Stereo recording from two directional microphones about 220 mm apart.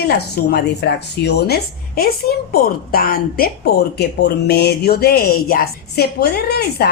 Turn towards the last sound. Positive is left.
turn(degrees=45)  # may be behind; listen again after turning